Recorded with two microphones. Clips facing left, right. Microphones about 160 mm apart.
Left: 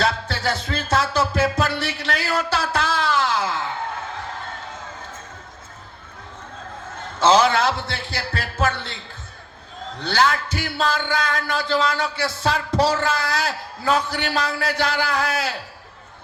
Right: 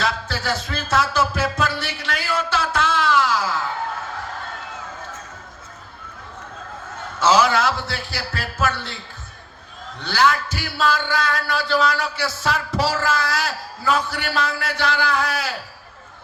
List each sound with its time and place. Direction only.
0.0 s music: 30° left (ahead or behind)
7.2 s a sound: 30° left (ahead or behind)
10.0 s speech: 30° left (ahead or behind)